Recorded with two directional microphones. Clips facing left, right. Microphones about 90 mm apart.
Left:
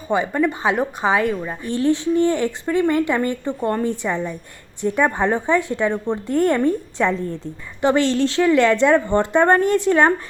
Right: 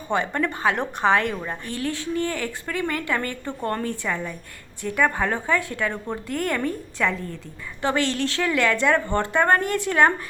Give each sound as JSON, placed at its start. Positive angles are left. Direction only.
{"t": 0.1, "sound": "a woman's voice", "side_deg": 10}
{"t": 1.6, "sound": "a woman's voice", "side_deg": 25}